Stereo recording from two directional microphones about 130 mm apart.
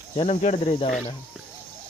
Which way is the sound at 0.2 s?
60° left (ahead or behind).